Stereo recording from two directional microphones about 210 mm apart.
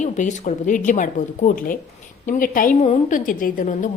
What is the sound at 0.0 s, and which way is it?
A woman's voice, 35° left (ahead or behind).